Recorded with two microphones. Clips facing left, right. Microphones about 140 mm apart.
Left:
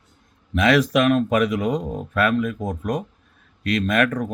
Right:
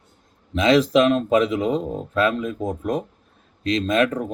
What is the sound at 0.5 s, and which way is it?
Speech, 25° right (ahead or behind).